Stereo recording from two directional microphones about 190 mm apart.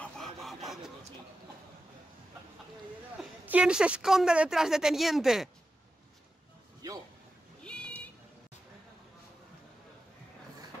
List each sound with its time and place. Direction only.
0.0 s printer: centre (ahead or behind)
3.2 s a woman's voice: 5° right (ahead or behind)
6.8 s a man's voice: 20° right (ahead or behind)
7.6 s a sound: 5° left (ahead or behind)